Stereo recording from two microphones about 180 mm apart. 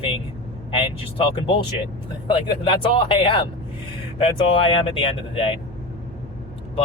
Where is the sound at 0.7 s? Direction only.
30° left (ahead or behind).